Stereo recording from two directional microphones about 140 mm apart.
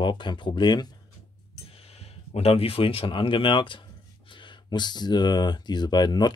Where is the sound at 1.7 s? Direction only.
45° left (ahead or behind).